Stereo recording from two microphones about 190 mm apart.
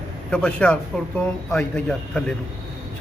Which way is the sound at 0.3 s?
5° left (ahead or behind).